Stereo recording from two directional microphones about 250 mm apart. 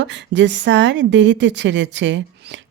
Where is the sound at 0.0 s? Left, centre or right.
Right.